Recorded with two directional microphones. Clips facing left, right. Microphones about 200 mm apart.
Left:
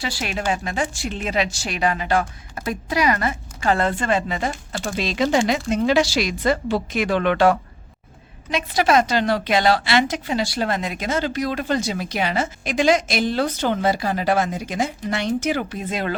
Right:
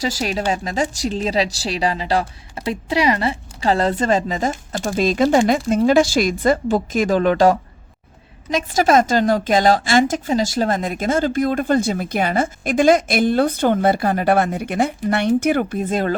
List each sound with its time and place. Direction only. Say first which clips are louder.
0.0 s a woman's voice: right 4 dB; 40° right (ahead or behind)